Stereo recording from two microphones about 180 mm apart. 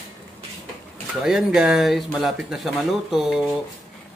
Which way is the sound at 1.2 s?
5° right (ahead or behind).